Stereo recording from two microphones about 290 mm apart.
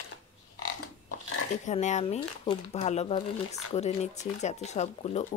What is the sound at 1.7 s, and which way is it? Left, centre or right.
Speech, left.